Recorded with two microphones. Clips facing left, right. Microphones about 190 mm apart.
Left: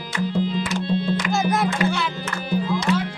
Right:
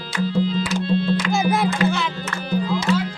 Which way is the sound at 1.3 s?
Centre (ahead or behind).